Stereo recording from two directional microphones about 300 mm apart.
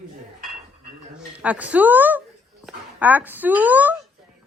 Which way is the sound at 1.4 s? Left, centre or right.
Centre.